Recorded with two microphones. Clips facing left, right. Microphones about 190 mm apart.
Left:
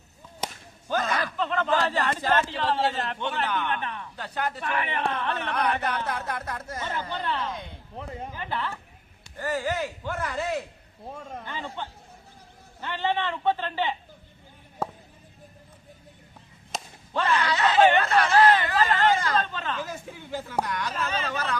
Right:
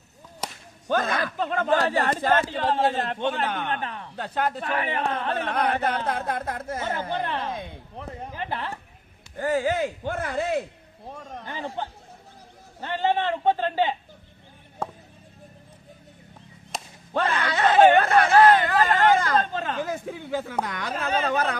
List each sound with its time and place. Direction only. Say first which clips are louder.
0.9 s a man's voice: right 2 dB; 55° right (ahead or behind); by 4.0 s 40° right (ahead or behind)
4.2 s a man's voice: right 4 dB; 55° right (ahead or behind)
11.4 s a man's voice: right 6 dB; 40° right (ahead or behind)
17.2 s speech: even; 55° right (ahead or behind)